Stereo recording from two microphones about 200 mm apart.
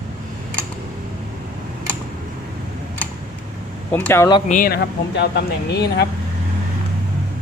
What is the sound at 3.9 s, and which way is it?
Speech, 10° left (ahead or behind).